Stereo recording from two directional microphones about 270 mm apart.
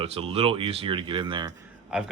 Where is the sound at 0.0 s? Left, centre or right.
Right.